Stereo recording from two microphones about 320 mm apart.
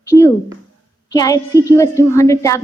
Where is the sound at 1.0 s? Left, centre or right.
Centre.